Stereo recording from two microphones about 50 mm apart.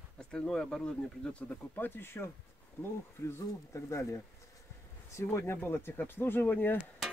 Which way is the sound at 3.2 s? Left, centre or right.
Left.